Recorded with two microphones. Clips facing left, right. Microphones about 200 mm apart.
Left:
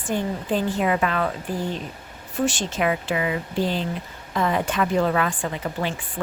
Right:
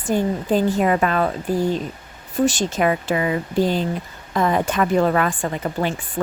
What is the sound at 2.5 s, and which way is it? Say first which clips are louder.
Speech: right 3 dB; 40° right (ahead or behind).